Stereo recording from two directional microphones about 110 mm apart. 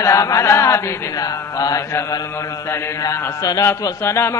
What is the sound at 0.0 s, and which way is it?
A man's voice, 30° left (ahead or behind).